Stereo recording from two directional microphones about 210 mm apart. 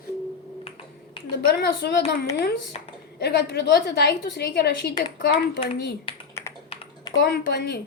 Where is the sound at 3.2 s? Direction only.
55° left (ahead or behind).